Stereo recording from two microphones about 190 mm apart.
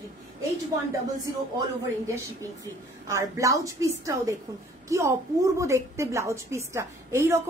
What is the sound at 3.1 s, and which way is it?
A woman's voice, 15° right (ahead or behind).